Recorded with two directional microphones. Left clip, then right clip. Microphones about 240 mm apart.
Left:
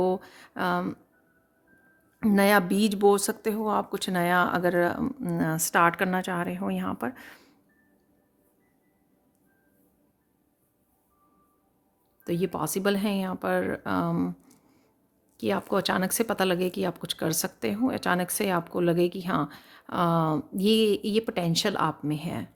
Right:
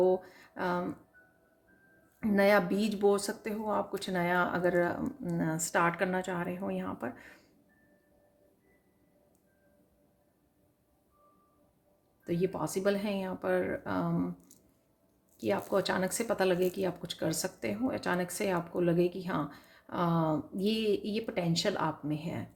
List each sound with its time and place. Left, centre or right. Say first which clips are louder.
0.0 s speech: left 1 dB; left
2.2 s speech: left 4 dB; left
12.2 s speech: left 4 dB; left
15.4 s speech: left 3 dB; left